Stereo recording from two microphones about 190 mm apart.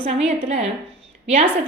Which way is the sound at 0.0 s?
30° right (ahead or behind).